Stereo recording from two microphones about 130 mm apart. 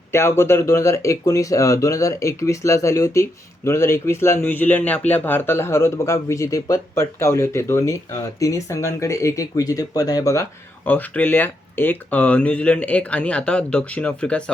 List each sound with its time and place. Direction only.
0.1 s speech: 20° left (ahead or behind)
10.8 s speech: 15° left (ahead or behind)